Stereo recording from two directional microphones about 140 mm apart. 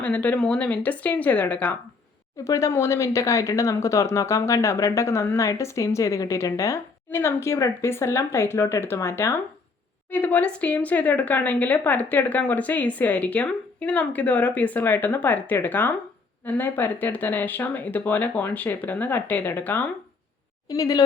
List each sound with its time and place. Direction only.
0.0 s a woman's voice: 10° left (ahead or behind)
2.4 s a woman's voice: 20° left (ahead or behind)
20.7 s speech: 25° left (ahead or behind)